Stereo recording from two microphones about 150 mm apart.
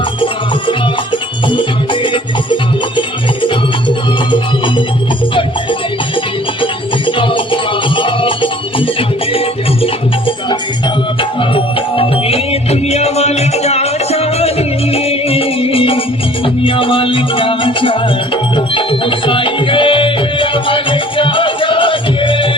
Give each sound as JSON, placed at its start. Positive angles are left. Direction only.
{"t": 1.5, "sound": "music", "side_deg": 30}
{"t": 7.2, "sound": "music", "side_deg": 35}